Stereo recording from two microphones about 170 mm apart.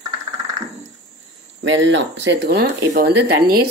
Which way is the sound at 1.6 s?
90° right.